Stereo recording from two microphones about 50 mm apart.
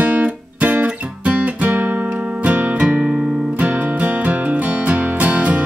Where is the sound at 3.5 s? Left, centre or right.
Right.